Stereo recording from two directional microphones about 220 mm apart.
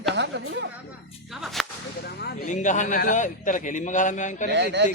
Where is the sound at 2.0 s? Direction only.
45° left (ahead or behind).